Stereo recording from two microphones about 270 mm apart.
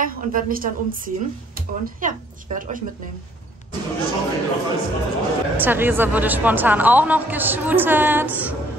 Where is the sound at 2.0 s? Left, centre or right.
Right.